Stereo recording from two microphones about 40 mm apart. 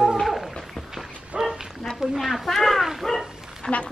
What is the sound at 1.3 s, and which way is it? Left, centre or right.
Dog, centre.